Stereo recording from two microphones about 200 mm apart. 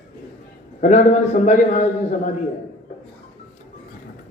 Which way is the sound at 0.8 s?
35° left (ahead or behind).